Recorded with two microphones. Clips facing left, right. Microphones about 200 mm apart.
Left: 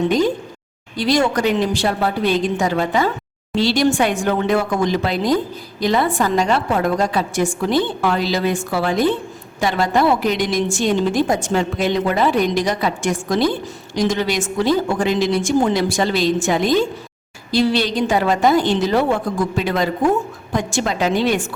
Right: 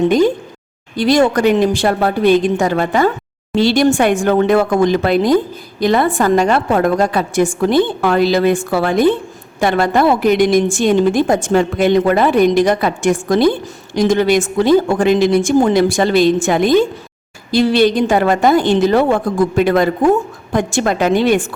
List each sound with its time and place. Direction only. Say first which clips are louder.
0.9 s a woman's voice: right 5 dB; 55° right (ahead or behind)